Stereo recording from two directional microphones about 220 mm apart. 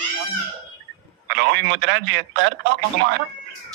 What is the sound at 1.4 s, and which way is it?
A man's voice, 60° right (ahead or behind).